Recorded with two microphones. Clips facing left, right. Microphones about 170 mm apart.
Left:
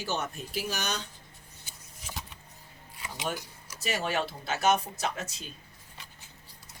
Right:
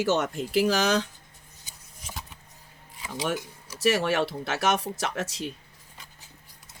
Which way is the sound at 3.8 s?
80° right.